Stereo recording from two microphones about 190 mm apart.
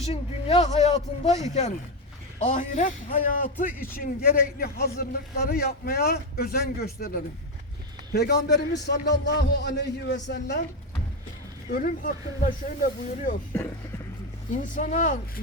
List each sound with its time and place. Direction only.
0.0 s a man's voice: 30° left (ahead or behind); by 10.6 s 65° left (ahead or behind)
11.7 s a man's voice: 50° left (ahead or behind)
14.5 s a man's voice: 40° left (ahead or behind)